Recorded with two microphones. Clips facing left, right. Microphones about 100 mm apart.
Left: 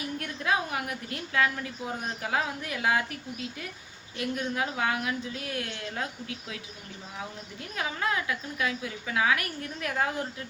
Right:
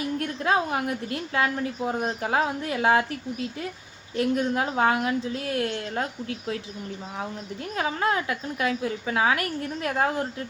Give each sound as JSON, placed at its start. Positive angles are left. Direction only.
{"t": 0.2, "sound": "a woman's voice", "side_deg": -30}
{"t": 4.2, "sound": "a woman's voice", "side_deg": -35}
{"t": 7.8, "sound": "a woman's voice", "side_deg": -35}